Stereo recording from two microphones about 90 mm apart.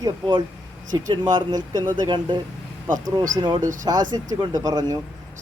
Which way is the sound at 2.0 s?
60° right (ahead or behind).